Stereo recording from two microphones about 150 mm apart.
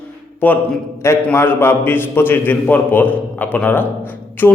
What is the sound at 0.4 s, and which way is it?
A man's voice, 10° left (ahead or behind).